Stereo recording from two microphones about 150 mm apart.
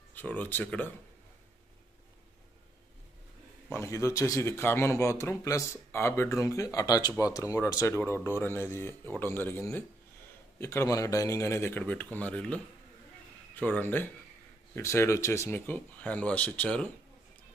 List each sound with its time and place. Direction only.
0.1 s speech: 10° left (ahead or behind)
3.7 s a man's voice: 20° left (ahead or behind)